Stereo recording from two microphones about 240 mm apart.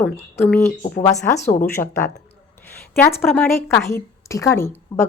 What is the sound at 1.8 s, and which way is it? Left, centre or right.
Speech, centre.